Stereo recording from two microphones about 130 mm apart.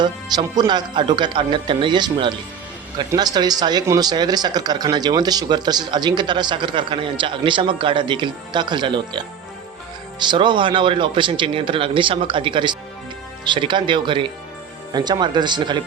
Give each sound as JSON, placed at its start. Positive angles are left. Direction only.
{"t": 0.0, "sound": "speech", "side_deg": -30}